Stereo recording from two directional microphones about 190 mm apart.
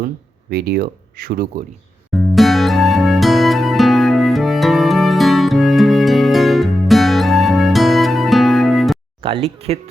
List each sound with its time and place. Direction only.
0.5 s speech: 55° right (ahead or behind)
2.1 s music: centre (ahead or behind)
9.2 s speech: 30° right (ahead or behind)